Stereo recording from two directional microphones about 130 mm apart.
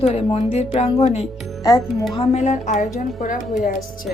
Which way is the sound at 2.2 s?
55° left (ahead or behind).